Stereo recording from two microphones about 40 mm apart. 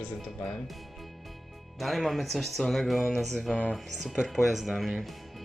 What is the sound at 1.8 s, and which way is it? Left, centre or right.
Speech, centre.